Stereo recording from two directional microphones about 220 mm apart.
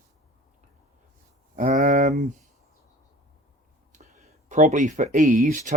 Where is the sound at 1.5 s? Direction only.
35° right (ahead or behind).